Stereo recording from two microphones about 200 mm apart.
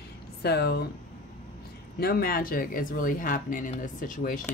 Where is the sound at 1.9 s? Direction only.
50° left (ahead or behind).